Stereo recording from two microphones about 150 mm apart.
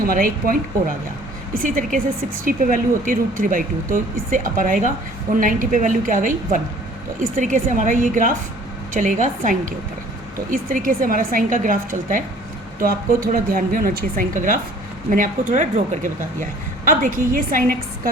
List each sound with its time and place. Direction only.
0.0 s a woman's voice: 70° right (ahead or behind)
13.2 s a woman's voice: 75° right (ahead or behind)